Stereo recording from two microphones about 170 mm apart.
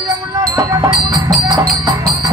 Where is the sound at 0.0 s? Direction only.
20° right (ahead or behind).